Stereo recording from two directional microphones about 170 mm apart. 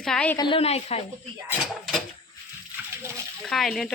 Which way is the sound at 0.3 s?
30° left (ahead or behind).